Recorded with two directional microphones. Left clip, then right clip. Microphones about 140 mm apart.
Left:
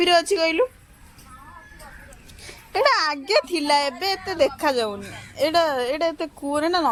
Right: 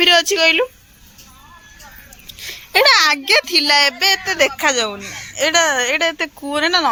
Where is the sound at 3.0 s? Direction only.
Centre (ahead or behind).